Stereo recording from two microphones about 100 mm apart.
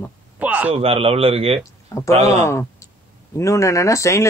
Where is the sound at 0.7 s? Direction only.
75° right (ahead or behind).